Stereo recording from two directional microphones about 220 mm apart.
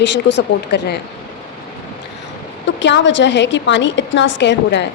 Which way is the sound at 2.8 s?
55° left (ahead or behind).